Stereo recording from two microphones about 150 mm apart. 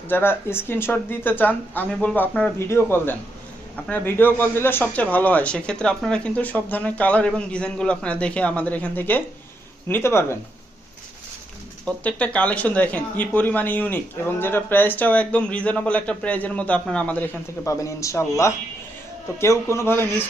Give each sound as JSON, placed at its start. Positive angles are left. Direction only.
{"t": 0.1, "sound": "speech", "side_deg": 15}
{"t": 11.9, "sound": "speech", "side_deg": 10}